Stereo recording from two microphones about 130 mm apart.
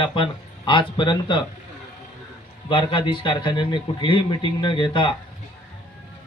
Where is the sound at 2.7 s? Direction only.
40° left (ahead or behind).